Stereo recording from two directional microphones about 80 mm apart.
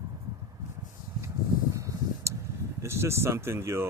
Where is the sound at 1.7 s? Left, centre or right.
Right.